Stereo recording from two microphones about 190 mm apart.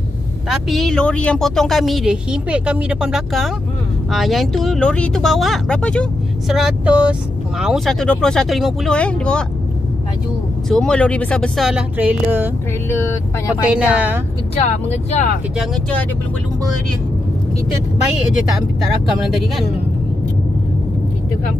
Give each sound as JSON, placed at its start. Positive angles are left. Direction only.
{"t": 0.5, "sound": "a woman's voice", "side_deg": 0}
{"t": 10.7, "sound": "a woman's voice", "side_deg": 5}
{"t": 13.7, "sound": "speech", "side_deg": -5}
{"t": 14.5, "sound": "speech", "side_deg": 35}
{"t": 15.5, "sound": "a woman's voice", "side_deg": 0}